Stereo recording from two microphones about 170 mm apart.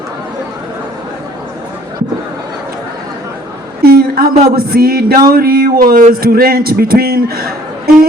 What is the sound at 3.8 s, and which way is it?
Speech, 60° right (ahead or behind).